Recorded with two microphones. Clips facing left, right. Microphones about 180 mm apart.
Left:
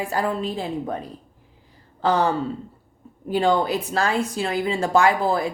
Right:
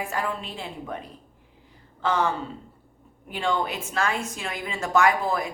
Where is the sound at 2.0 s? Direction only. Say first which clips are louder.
Left 5 dB; 35° left (ahead or behind).